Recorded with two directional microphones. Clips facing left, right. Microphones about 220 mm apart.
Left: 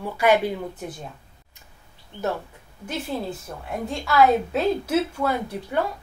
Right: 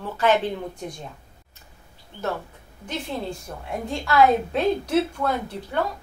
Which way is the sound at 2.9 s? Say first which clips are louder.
Left 1 dB; 5° left (ahead or behind).